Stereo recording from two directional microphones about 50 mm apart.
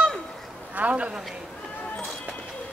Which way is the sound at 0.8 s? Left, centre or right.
Right.